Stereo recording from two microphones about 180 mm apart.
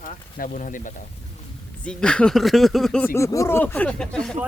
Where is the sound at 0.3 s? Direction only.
45° left (ahead or behind).